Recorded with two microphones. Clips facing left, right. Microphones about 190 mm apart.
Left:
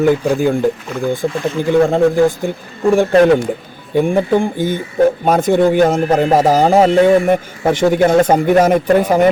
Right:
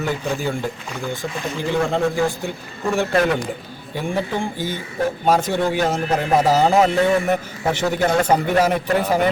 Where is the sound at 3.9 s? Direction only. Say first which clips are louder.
Left 10 dB; 55° left (ahead or behind).